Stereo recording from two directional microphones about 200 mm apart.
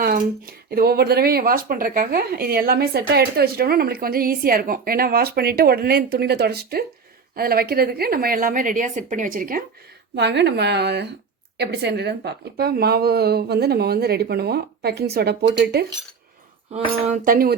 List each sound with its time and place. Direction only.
0.7 s speech: 50° right (ahead or behind)
10.2 s speech: 60° right (ahead or behind)
16.7 s speech: 40° right (ahead or behind)